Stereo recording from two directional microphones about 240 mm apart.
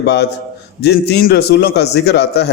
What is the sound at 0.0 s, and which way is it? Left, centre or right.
A man's voice, left.